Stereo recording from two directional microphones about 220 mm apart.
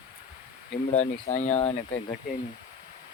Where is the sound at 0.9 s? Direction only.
30° left (ahead or behind).